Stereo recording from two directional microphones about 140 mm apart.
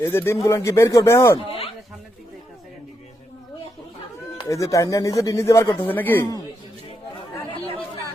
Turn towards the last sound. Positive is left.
turn(degrees=15)  # may be behind; listen again after turning